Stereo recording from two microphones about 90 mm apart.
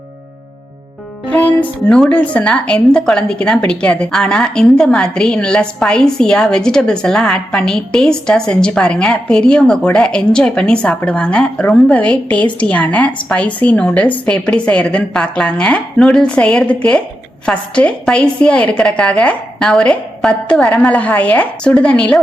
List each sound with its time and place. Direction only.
1.3 s a woman's voice: 15° left (ahead or behind)